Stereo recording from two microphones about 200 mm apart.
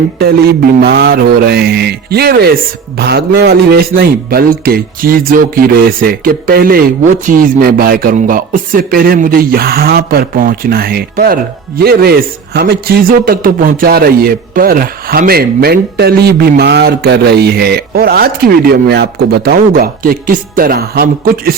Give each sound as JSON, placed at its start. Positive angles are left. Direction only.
{"t": 0.2, "sound": "a man's voice", "side_deg": -50}